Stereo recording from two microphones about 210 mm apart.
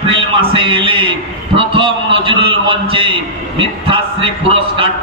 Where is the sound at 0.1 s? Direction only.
25° right (ahead or behind).